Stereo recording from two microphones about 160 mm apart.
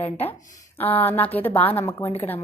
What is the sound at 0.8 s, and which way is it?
A woman's voice, 10° left (ahead or behind).